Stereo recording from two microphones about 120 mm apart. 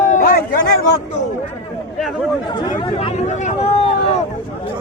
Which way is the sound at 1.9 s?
Centre (ahead or behind).